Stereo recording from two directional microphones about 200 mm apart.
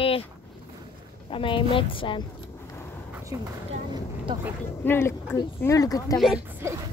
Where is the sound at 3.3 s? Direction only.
15° right (ahead or behind).